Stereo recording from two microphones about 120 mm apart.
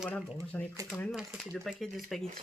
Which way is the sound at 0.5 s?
15° left (ahead or behind).